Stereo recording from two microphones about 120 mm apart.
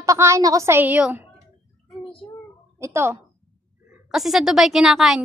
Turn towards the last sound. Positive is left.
turn(degrees=0)  # may be behind; listen again after turning